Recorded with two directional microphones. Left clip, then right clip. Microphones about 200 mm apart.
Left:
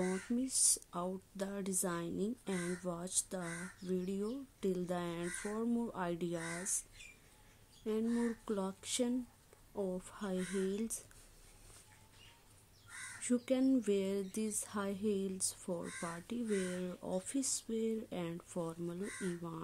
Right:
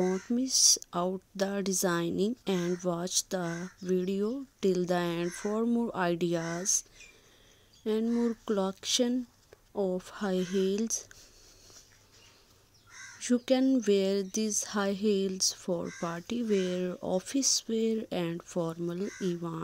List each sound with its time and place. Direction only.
0.0 s speech: 30° right (ahead or behind)
7.8 s speech: 30° right (ahead or behind)
13.2 s speech: 25° right (ahead or behind)